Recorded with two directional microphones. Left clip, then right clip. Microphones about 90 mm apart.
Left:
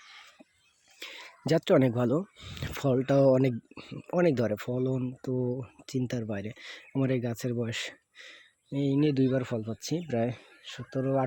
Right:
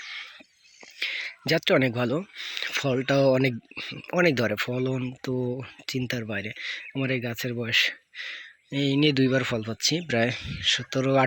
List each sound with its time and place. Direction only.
0.9 s whispering: 35° left (ahead or behind)
1.5 s speech: 40° left (ahead or behind)
6.6 s speech: 45° left (ahead or behind); by 11.3 s 5° left (ahead or behind)